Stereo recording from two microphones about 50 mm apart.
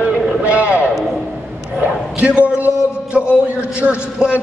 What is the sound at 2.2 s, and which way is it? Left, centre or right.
Speech, right.